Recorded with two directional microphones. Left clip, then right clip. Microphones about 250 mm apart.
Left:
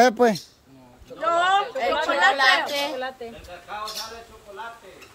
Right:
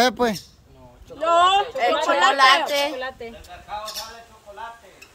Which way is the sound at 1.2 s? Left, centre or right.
Right.